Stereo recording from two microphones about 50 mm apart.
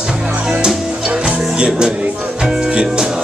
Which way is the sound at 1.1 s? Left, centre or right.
Centre.